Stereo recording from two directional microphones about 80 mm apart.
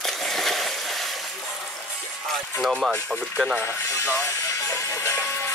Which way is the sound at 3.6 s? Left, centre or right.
Left.